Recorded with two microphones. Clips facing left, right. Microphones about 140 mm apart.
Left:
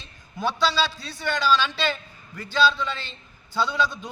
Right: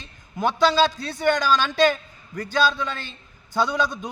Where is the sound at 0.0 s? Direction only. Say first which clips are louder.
Right 3 dB; 50° right (ahead or behind).